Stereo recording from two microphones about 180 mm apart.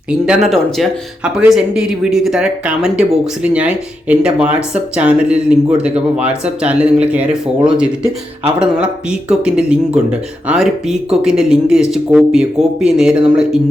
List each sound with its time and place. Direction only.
0.1 s speech: centre (ahead or behind)